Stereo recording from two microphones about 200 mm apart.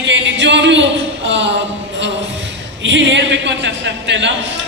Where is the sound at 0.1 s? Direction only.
65° right (ahead or behind).